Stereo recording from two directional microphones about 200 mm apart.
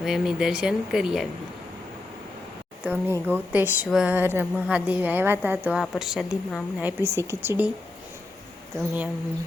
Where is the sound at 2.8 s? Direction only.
10° right (ahead or behind).